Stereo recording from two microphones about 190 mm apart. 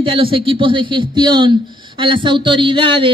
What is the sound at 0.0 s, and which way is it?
A man's voice, 25° right (ahead or behind).